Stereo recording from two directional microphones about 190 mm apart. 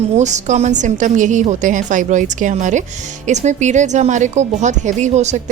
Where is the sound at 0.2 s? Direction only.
40° right (ahead or behind).